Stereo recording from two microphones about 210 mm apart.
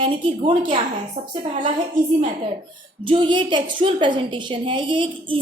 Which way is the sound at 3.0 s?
25° right (ahead or behind).